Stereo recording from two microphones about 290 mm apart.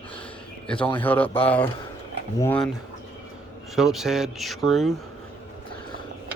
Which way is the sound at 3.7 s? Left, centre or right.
Centre.